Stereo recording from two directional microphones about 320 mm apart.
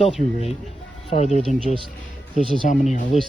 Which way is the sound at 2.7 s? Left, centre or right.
Left.